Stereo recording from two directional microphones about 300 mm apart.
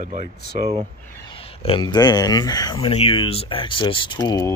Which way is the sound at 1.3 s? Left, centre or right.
Centre.